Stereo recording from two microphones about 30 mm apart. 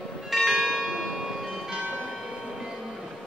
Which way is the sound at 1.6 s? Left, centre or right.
Right.